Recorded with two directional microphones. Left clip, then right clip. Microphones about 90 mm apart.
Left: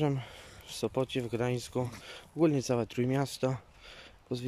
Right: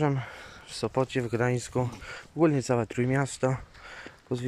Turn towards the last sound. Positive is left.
turn(degrees=15)  # may be behind; listen again after turning